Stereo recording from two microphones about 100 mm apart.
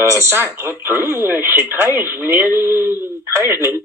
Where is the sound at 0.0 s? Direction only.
30° right (ahead or behind).